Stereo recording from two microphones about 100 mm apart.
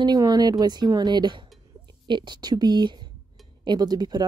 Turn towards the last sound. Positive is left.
turn(degrees=-40)  # may be behind; listen again after turning